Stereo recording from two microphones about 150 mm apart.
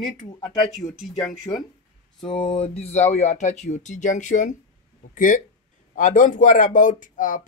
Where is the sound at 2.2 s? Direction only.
30° left (ahead or behind).